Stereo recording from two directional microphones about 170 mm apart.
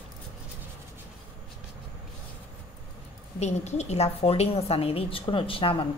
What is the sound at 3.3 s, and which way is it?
A woman's voice, 40° left (ahead or behind).